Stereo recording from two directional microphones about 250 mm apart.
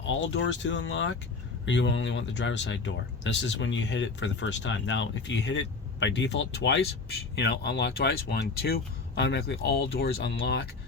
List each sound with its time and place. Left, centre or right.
0.0 s speech: left